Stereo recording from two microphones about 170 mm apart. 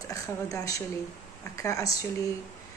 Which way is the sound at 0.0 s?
20° left (ahead or behind).